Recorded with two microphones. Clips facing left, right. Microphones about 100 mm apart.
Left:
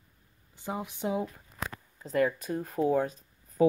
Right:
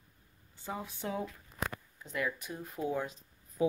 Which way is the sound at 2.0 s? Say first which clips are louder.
Left 9 dB; 40° left (ahead or behind).